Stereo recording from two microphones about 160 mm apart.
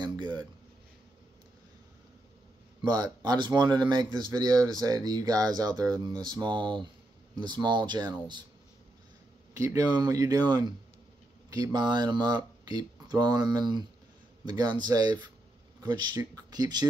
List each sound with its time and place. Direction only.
0.0 s a sound: 30° right (ahead or behind)
2.8 s speech: 25° right (ahead or behind)
9.6 s speech: 20° right (ahead or behind)